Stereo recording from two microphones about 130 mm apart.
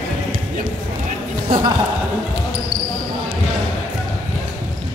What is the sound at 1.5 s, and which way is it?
Speech, 90° right.